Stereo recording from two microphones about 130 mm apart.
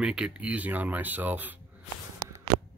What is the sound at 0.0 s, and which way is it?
Speech, 5° right (ahead or behind).